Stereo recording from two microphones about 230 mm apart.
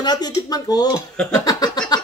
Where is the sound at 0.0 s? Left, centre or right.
Centre.